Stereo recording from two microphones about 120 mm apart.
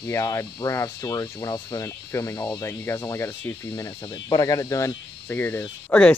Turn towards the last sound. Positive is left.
turn(degrees=15)  # may be behind; listen again after turning